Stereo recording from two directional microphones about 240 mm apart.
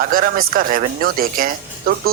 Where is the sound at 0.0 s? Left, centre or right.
Right.